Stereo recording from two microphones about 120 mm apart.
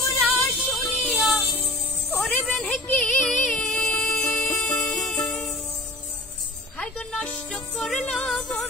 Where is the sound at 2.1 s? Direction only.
10° left (ahead or behind).